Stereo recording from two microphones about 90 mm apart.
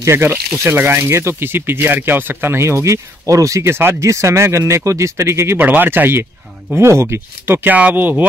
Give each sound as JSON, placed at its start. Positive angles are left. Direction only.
{"t": 0.0, "sound": "speech", "side_deg": -25}